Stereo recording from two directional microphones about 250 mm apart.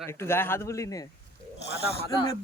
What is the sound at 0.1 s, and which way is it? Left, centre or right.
Speech, centre.